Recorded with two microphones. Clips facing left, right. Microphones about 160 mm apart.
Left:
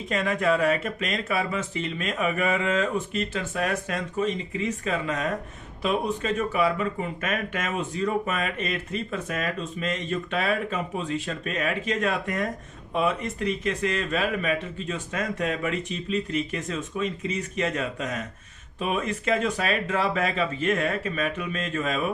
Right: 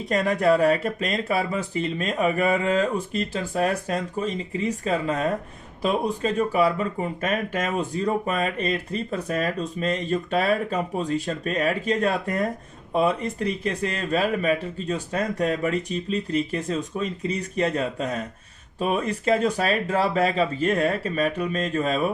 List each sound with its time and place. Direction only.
0.1 s speech: 40° right (ahead or behind)